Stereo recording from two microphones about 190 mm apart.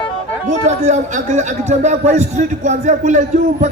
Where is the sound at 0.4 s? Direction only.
40° right (ahead or behind).